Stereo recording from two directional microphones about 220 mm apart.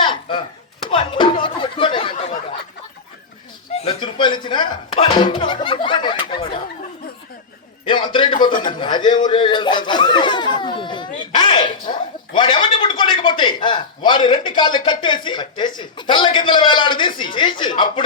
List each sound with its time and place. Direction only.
0.0 s chopping: 20° left (ahead or behind)
0.9 s a sound: 25° left (ahead or behind)
3.7 s speech: 25° left (ahead or behind)
7.9 s speech: 20° left (ahead or behind)